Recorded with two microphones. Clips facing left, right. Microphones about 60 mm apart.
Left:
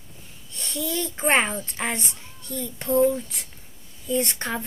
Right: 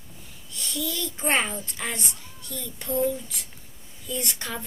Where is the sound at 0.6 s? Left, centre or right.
Left.